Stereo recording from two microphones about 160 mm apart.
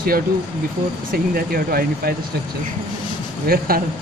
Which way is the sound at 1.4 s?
70° right (ahead or behind).